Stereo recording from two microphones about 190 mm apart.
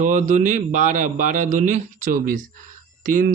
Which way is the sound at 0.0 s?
40° right (ahead or behind).